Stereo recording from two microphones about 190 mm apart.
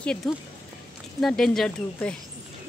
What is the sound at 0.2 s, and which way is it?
Speech, centre (ahead or behind).